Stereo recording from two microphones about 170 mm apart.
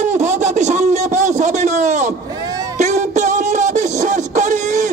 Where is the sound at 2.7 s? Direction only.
45° right (ahead or behind).